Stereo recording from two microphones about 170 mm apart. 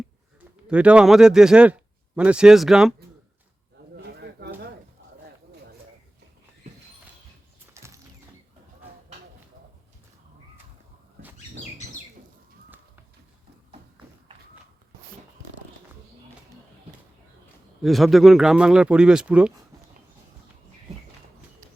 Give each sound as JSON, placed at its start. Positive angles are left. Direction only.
{"t": 0.7, "sound": "speech", "side_deg": -5}
{"t": 3.9, "sound": "a sound", "side_deg": -75}
{"t": 7.7, "sound": "music", "side_deg": -15}
{"t": 17.8, "sound": "speech", "side_deg": 0}